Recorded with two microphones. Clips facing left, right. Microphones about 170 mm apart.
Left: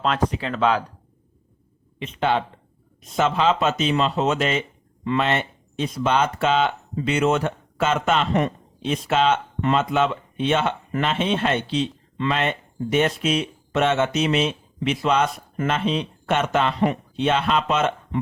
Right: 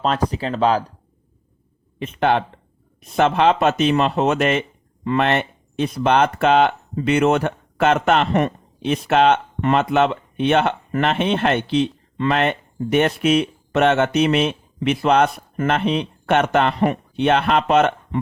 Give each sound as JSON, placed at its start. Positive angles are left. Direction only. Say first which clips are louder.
{"t": 0.0, "sound": "speech", "louder": "right 2 dB", "side_deg": -35}
{"t": 2.0, "sound": "speech", "louder": "right 4 dB", "side_deg": -55}